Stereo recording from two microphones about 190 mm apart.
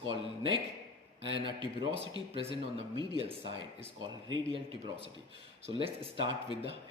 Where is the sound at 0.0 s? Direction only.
25° right (ahead or behind).